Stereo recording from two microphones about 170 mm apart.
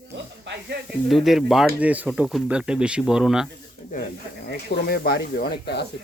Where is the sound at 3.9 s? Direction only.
50° left (ahead or behind).